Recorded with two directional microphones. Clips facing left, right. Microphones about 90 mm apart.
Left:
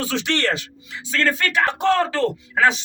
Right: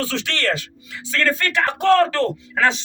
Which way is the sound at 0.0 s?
20° left (ahead or behind).